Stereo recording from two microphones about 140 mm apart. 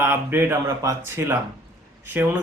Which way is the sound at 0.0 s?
15° right (ahead or behind).